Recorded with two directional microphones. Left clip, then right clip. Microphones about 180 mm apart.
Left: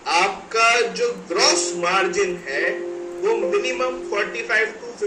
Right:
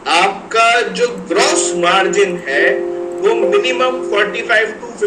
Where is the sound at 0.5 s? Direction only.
50° right (ahead or behind).